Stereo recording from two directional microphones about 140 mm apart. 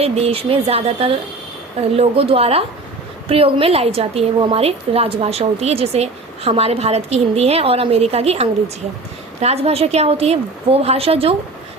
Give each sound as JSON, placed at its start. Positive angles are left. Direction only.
{"t": 0.0, "sound": "a woman's voice", "side_deg": -45}